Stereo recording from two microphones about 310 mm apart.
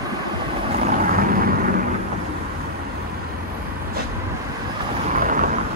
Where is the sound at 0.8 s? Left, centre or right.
Right.